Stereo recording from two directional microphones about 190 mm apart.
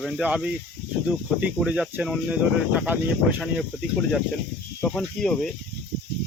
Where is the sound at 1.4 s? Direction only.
5° right (ahead or behind).